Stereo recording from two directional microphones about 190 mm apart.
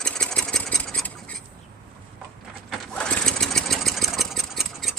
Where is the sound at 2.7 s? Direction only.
5° left (ahead or behind).